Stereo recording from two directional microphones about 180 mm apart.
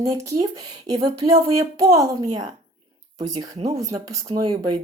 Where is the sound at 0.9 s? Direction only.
20° right (ahead or behind).